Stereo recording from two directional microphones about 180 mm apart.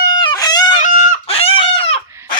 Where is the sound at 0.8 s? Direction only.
45° left (ahead or behind).